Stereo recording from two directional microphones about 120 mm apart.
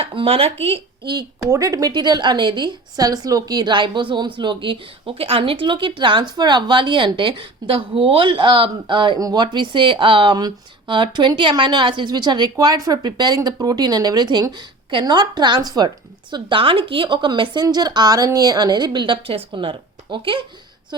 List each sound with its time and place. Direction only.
0.0 s speech: 45° right (ahead or behind)
1.5 s speech: 25° right (ahead or behind)
16.3 s speech: 45° right (ahead or behind)